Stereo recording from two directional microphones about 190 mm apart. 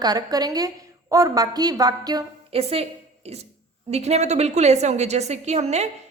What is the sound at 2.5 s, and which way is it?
A woman's voice, 30° right (ahead or behind).